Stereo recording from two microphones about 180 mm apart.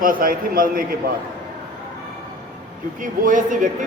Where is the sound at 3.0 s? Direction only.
45° right (ahead or behind).